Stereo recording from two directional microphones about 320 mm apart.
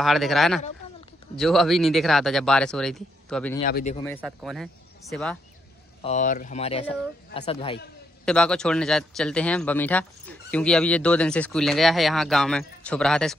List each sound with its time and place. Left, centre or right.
0.0 s a man's voice: centre
3.5 s speech: left
4.2 s a man's voice: centre
6.0 s speech: left
8.3 s a man's voice: centre